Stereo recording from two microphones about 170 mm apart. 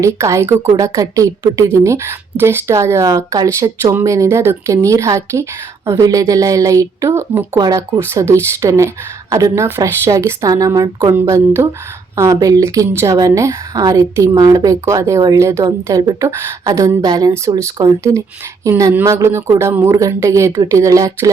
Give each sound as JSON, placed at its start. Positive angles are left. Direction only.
{"t": 0.0, "sound": "a woman's voice", "side_deg": -15}